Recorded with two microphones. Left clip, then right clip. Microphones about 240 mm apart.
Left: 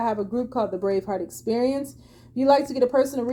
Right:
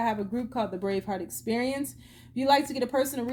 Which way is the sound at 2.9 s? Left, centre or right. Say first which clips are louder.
Left 6 dB; right.